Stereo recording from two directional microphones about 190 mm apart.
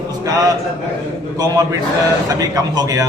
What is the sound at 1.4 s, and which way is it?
A man's voice, 20° right (ahead or behind).